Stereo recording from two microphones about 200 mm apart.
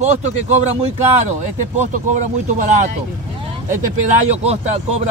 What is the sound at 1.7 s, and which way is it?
Speech, 35° right (ahead or behind).